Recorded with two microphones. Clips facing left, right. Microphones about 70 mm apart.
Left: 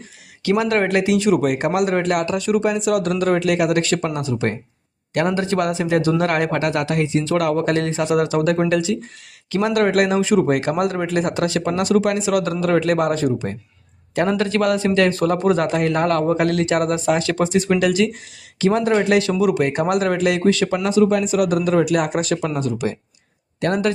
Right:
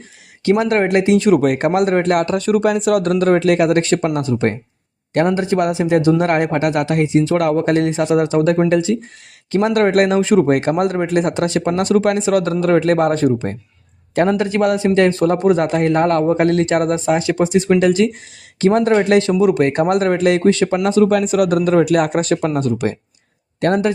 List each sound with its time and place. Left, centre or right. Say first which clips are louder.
0.4 s speech: right 3 dB; right
2.6 s speech: right 4 dB; right
5.1 s speech: right 4 dB; right
14.3 s speech: right 2 dB; right
19.5 s speech: right 4 dB; right
20.8 s speech: right 2 dB; right